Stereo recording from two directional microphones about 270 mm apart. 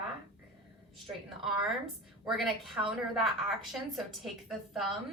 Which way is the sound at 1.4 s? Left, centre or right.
Centre.